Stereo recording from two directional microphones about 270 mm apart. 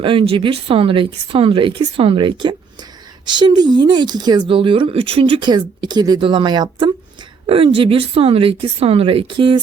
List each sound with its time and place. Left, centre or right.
0.0 s a woman's voice: centre